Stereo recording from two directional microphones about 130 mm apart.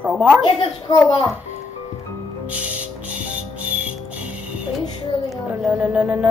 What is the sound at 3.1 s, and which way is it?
Music, 10° right (ahead or behind).